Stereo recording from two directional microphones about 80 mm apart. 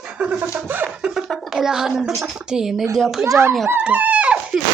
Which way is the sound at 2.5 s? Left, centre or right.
Centre.